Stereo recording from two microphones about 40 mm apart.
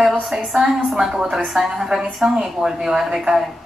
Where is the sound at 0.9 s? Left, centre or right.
Centre.